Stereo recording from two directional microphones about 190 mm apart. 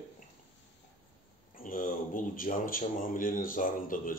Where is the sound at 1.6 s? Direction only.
45° left (ahead or behind).